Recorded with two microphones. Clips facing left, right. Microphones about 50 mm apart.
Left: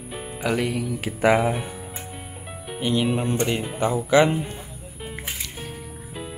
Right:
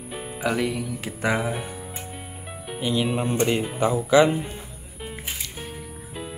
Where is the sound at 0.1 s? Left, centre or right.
Centre.